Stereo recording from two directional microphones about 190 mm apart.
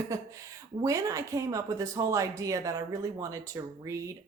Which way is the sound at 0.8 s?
15° right (ahead or behind).